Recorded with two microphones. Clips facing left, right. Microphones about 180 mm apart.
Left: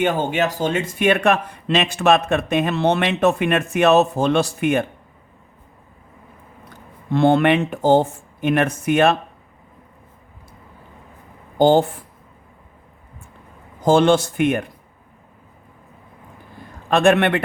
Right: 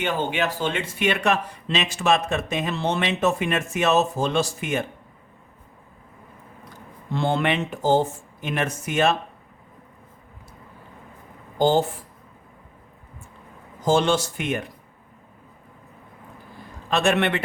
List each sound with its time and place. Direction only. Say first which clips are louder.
0.0 s speech: left 5 dB; 45° left (ahead or behind)
7.1 s speech: left 8 dB; 60° left (ahead or behind)
11.5 s speech: left 5 dB; 55° left (ahead or behind)
13.8 s speech: left 6 dB; 55° left (ahead or behind)
16.9 s speech: left 6 dB; 55° left (ahead or behind)